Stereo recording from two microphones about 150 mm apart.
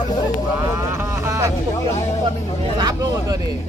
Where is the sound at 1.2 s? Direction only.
20° right (ahead or behind).